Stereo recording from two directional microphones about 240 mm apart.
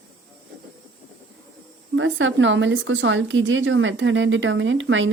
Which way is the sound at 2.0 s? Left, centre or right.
Right.